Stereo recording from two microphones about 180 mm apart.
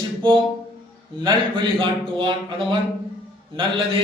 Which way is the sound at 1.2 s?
25° right (ahead or behind).